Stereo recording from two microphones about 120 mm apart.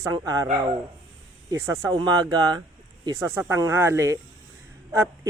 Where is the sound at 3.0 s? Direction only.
25° right (ahead or behind).